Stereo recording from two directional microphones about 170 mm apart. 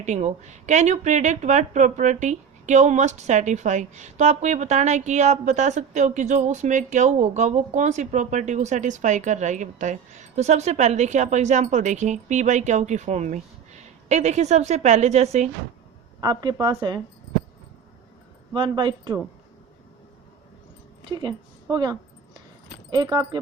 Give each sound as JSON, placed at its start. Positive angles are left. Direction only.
{"t": 0.0, "sound": "a woman's voice", "side_deg": -45}
{"t": 16.2, "sound": "speech", "side_deg": -25}
{"t": 18.5, "sound": "speech", "side_deg": -30}
{"t": 21.0, "sound": "a woman's voice", "side_deg": -25}